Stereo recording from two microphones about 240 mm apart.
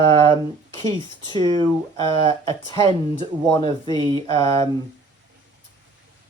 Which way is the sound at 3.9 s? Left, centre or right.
Centre.